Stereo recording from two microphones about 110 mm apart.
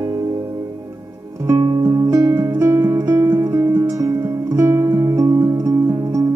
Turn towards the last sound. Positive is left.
turn(degrees=-30)  # may be behind; listen again after turning